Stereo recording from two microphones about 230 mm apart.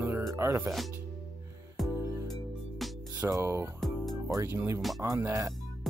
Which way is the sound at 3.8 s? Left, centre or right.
Centre.